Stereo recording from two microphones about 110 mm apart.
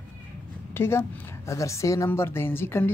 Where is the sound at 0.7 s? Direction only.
25° left (ahead or behind).